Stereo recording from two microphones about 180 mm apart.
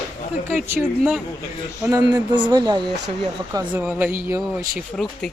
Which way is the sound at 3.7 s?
10° right (ahead or behind).